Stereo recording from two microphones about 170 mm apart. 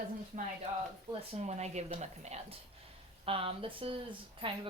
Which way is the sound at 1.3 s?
40° right (ahead or behind).